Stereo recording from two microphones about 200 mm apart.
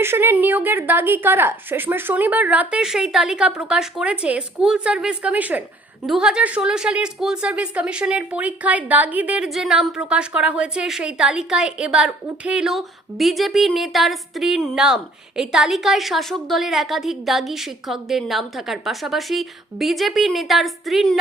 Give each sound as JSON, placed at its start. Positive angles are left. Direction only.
{"t": 0.0, "sound": "a woman's voice", "side_deg": -10}